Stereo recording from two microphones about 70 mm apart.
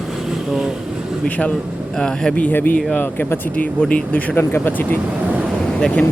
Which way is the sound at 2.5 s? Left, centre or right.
Left.